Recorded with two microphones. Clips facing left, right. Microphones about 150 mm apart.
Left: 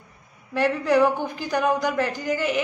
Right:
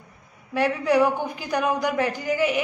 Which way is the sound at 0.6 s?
10° right (ahead or behind).